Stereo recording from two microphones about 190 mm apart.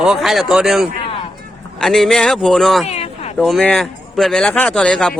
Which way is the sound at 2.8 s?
35° left (ahead or behind).